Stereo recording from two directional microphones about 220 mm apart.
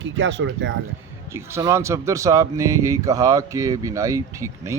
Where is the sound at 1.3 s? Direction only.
10° right (ahead or behind).